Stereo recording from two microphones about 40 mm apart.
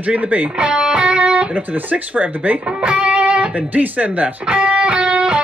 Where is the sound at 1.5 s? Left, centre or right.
Right.